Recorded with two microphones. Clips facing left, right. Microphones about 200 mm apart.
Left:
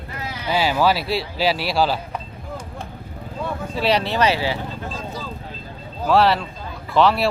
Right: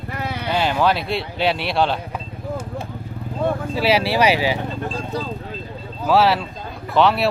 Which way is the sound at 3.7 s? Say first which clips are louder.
Even; 5° right (ahead or behind).